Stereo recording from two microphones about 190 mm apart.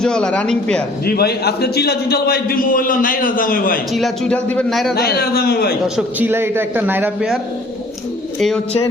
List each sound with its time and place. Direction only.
0.0 s a man's voice: 5° left (ahead or behind)
1.0 s a man's voice: 55° left (ahead or behind)
3.9 s a man's voice: centre (ahead or behind)
4.9 s a man's voice: 55° left (ahead or behind)
6.0 s a man's voice: 10° right (ahead or behind)
8.4 s a man's voice: centre (ahead or behind)